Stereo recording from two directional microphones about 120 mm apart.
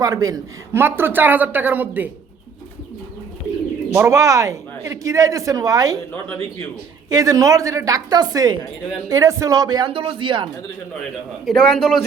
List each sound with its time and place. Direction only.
0.0 s a woman's voice: 30° right (ahead or behind)
0.7 s speech: 20° right (ahead or behind)
3.9 s speech: 25° right (ahead or behind)
7.1 s speech: 30° right (ahead or behind)
9.9 s speech: 45° right (ahead or behind)
11.4 s a man's voice: 5° left (ahead or behind)